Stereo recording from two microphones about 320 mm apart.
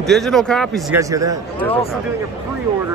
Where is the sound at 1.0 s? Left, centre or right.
Centre.